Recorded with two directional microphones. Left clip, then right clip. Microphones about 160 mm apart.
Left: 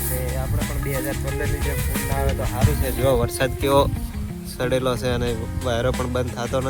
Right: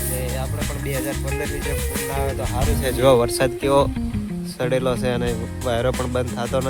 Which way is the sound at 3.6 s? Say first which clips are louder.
Left 1 dB; 5° right (ahead or behind).